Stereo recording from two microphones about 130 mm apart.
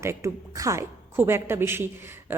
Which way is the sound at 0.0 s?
20° right (ahead or behind).